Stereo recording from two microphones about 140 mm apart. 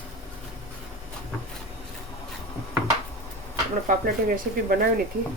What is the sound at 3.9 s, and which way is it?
Speech, 80° right.